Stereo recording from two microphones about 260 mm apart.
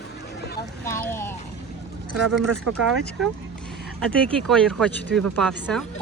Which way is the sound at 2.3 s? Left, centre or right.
Right.